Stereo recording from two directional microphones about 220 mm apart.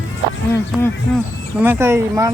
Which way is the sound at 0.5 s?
10° left (ahead or behind).